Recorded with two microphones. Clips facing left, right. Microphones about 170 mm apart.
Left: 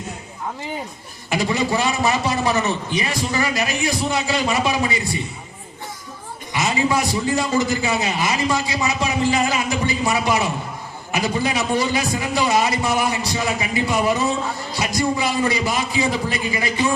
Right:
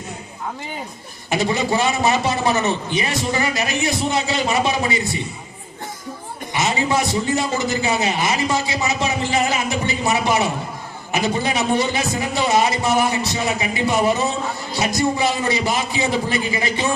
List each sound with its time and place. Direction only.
1.3 s a man's voice: 25° right (ahead or behind)
6.5 s a sound: 25° right (ahead or behind)
6.9 s a man's voice: 25° right (ahead or behind)